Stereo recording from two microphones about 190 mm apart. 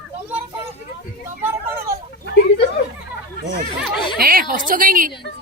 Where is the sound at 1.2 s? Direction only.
10° right (ahead or behind).